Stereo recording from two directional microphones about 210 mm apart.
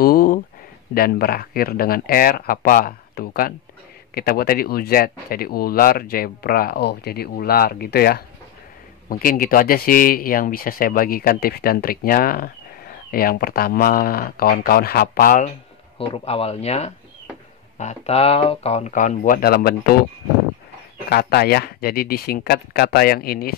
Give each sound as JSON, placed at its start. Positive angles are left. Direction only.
{"t": 0.0, "sound": "a sound", "side_deg": 45}
{"t": 0.9, "sound": "speech", "side_deg": 45}
{"t": 16.0, "sound": "speech", "side_deg": 25}
{"t": 21.1, "sound": "speech", "side_deg": 50}